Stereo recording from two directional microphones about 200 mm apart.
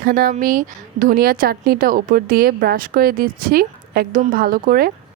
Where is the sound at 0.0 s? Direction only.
45° right (ahead or behind).